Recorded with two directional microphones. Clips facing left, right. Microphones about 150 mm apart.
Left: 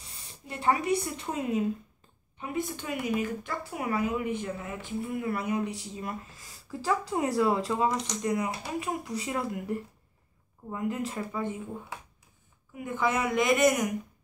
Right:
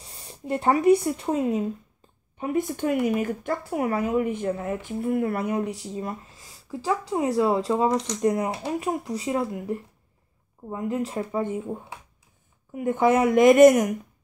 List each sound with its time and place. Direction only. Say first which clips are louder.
0.0 s speech: right 9 dB; 45° right (ahead or behind)
6.7 s speech: right 3 dB; 15° right (ahead or behind)
7.2 s speech: right 4 dB; 30° right (ahead or behind)
12.7 s speech: right 8 dB; 45° right (ahead or behind)